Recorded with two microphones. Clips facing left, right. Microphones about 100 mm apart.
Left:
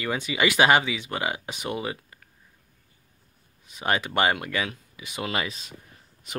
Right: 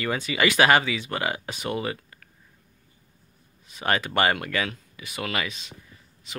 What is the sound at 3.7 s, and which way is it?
Speech, 15° left (ahead or behind).